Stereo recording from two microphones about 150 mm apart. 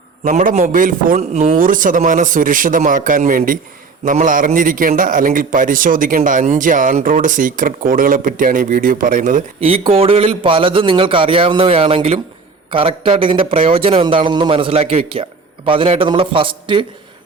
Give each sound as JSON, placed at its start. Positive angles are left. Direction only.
{"t": 0.3, "sound": "a man's voice", "side_deg": -55}
{"t": 9.6, "sound": "speech", "side_deg": -40}